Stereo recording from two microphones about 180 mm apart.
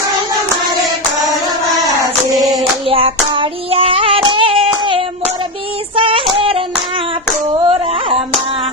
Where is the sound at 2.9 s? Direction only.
30° right (ahead or behind).